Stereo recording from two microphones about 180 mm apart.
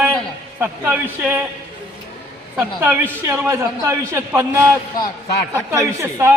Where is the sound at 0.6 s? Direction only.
10° right (ahead or behind).